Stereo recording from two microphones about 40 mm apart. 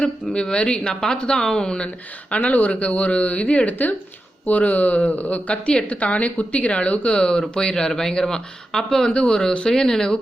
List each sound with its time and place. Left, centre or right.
0.5 s speech: left
2.3 s speech: left; by 10.2 s centre